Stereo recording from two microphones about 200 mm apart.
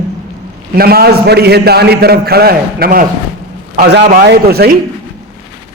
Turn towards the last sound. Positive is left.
turn(degrees=-50)  # may be behind; listen again after turning